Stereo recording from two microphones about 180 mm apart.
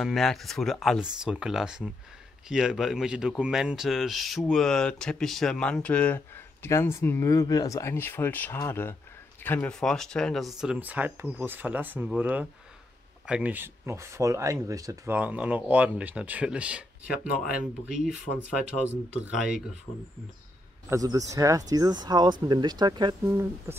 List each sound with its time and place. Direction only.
0.0 s speech: centre (ahead or behind)
20.9 s speech: 20° right (ahead or behind)
23.2 s speech: 15° right (ahead or behind)